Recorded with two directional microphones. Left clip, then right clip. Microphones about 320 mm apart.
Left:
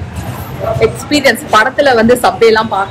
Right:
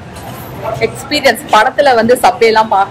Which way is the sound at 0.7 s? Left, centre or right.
Centre.